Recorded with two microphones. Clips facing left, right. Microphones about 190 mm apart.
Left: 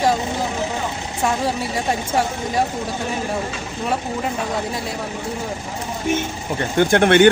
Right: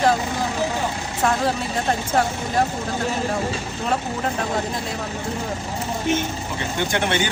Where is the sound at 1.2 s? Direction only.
10° left (ahead or behind).